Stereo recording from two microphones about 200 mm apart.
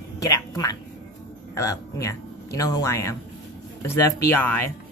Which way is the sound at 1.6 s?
15° left (ahead or behind).